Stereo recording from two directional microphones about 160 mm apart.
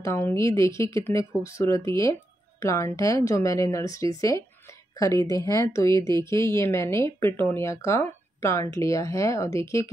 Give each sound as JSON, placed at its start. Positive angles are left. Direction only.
{"t": 0.0, "sound": "speech", "side_deg": 20}